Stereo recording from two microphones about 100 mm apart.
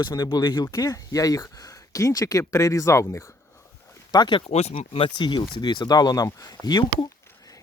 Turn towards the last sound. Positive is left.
turn(degrees=45)  # may be behind; listen again after turning